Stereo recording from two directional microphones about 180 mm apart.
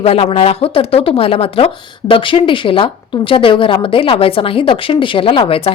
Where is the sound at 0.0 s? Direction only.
35° left (ahead or behind).